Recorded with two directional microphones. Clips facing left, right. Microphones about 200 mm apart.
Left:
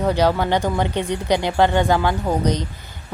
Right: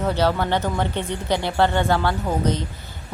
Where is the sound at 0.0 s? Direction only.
15° left (ahead or behind).